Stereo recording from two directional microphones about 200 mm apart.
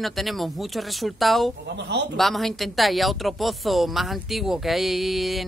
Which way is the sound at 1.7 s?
60° right (ahead or behind).